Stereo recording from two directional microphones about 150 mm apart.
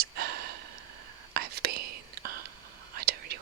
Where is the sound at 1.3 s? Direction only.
90° right.